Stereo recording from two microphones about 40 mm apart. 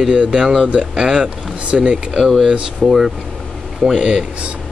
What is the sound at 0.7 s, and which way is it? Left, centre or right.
Speech, right.